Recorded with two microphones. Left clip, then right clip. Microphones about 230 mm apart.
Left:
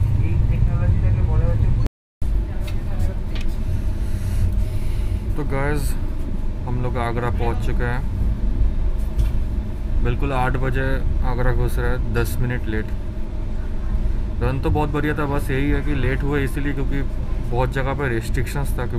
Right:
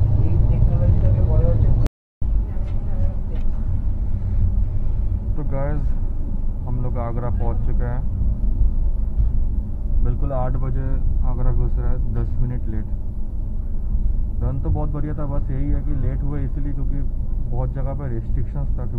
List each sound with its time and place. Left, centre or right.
5.5 s speech: left
6.8 s speech: left
10.0 s speech: centre
14.4 s speech: left